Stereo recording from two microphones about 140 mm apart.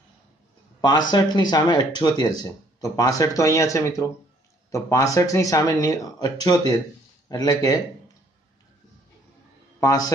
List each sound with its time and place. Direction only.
0.7 s speech: 30° left (ahead or behind)
9.8 s a man's voice: 25° left (ahead or behind)